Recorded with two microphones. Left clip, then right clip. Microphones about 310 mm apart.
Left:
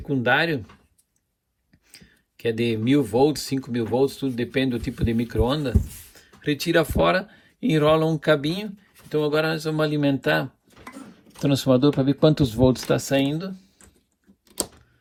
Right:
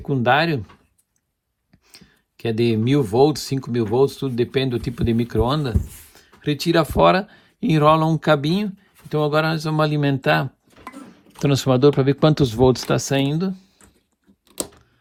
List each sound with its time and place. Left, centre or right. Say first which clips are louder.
0.1 s speech: right 3 dB; centre
1.9 s speech: right 2 dB; centre